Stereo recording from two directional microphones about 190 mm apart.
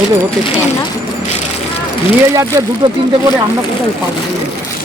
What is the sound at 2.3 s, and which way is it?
Speech, 15° right (ahead or behind).